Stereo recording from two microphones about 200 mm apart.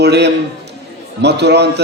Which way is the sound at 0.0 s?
55° right (ahead or behind).